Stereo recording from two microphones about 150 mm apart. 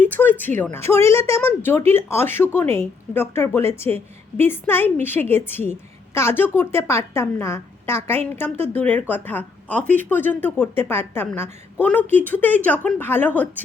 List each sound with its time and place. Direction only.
0.0 s a woman's voice: 10° left (ahead or behind)